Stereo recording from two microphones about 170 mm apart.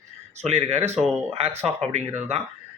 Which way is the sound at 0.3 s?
40° right (ahead or behind).